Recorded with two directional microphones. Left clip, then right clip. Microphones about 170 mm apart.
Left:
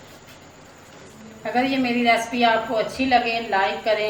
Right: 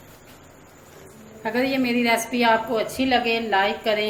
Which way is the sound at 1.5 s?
45° right (ahead or behind).